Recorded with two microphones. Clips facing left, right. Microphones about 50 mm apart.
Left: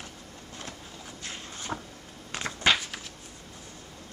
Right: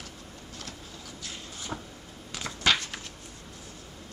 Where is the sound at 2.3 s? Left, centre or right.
Left.